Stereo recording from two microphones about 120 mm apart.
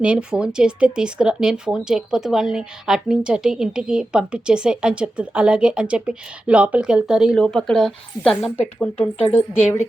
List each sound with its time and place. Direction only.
0.0 s speech: 10° right (ahead or behind)
9.0 s speech: 60° left (ahead or behind)